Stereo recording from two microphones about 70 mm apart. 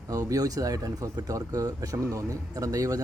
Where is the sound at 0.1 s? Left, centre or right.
Right.